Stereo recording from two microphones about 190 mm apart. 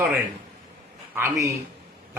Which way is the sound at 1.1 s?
15° right (ahead or behind).